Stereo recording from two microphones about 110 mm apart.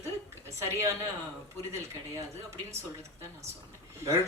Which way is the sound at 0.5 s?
25° right (ahead or behind).